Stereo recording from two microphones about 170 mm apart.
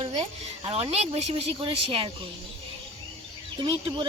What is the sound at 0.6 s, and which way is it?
Speech, 35° right (ahead or behind).